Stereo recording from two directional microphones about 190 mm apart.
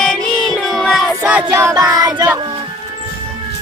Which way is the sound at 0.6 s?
Centre (ahead or behind).